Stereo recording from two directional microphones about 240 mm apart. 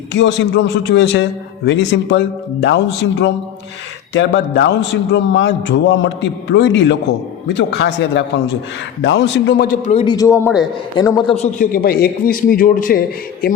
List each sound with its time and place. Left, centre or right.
0.1 s a man's voice: left; by 11.3 s centre
11.6 s a man's voice: left